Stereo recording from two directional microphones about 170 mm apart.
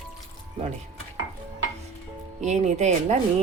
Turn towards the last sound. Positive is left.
turn(degrees=-40)  # may be behind; listen again after turning